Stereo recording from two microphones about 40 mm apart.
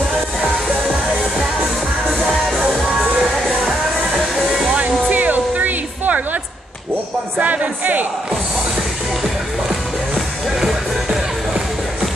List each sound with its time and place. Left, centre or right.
2.7 s music: centre
4.4 s music: centre
4.7 s music: right
7.3 s a sound: right
10.1 s music: centre